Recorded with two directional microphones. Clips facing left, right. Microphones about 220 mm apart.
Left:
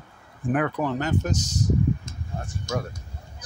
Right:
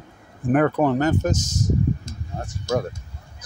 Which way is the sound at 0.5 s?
50° right (ahead or behind).